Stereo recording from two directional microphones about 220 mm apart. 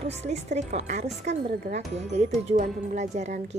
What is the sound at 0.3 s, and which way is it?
Speech, 30° right (ahead or behind).